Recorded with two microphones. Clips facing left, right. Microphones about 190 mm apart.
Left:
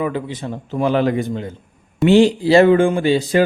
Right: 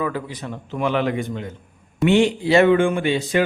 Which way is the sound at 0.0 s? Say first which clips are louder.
Left 3 dB; 25° left (ahead or behind).